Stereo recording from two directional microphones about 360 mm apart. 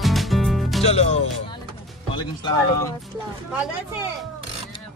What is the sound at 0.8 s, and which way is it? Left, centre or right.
Speech, centre.